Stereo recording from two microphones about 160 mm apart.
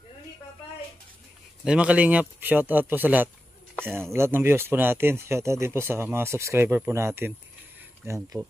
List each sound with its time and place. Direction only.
1.6 s speech: 5° right (ahead or behind)